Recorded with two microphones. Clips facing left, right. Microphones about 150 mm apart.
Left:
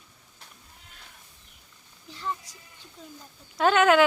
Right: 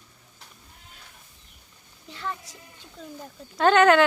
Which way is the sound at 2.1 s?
70° right (ahead or behind).